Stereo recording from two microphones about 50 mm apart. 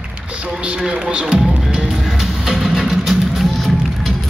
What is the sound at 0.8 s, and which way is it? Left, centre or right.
Speech, centre.